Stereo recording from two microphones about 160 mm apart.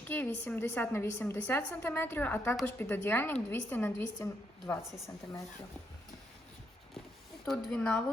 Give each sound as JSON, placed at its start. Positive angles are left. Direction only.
{"t": 0.1, "sound": "a woman's voice", "side_deg": 10}
{"t": 4.8, "sound": "speech", "side_deg": 0}
{"t": 5.0, "sound": "speech", "side_deg": 20}
{"t": 7.4, "sound": "speech", "side_deg": 5}